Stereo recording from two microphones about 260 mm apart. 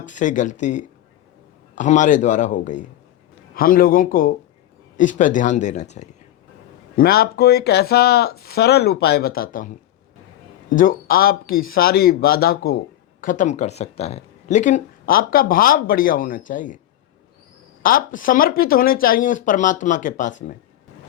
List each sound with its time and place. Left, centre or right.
0.0 s a man's voice: left
10.8 s speech: left
17.8 s speech: left